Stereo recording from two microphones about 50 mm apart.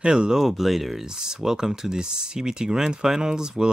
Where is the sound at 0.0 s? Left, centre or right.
Centre.